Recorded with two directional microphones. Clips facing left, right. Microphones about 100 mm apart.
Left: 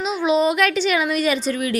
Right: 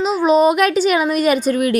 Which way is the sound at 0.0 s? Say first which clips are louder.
Right 5 dB; 40° right (ahead or behind).